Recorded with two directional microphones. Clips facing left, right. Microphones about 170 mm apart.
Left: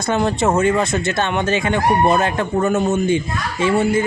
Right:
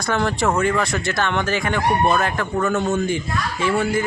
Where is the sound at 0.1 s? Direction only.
20° left (ahead or behind).